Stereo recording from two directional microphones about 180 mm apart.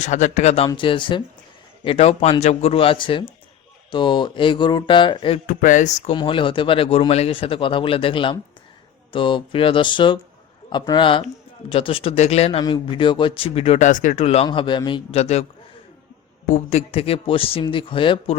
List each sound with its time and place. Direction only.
0.0 s a man's voice: 40° left (ahead or behind)
5.5 s speech: 50° left (ahead or behind)
6.1 s a man's voice: 30° left (ahead or behind)
16.5 s a man's voice: 35° left (ahead or behind)